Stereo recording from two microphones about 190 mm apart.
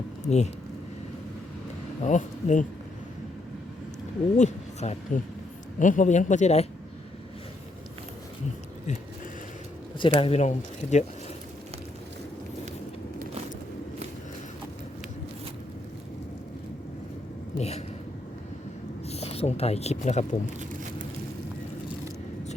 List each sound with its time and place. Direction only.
0.3 s speech: 35° left (ahead or behind)
2.0 s speech: 40° left (ahead or behind)
4.4 s speech: 35° left (ahead or behind)
10.2 s speech: 30° left (ahead or behind)
17.6 s a sound: 35° left (ahead or behind)
19.0 s speech: 35° left (ahead or behind)